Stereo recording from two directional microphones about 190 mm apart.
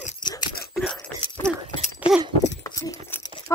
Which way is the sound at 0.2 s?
20° left (ahead or behind).